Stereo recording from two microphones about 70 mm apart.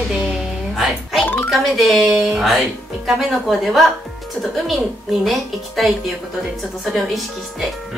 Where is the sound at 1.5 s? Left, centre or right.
Centre.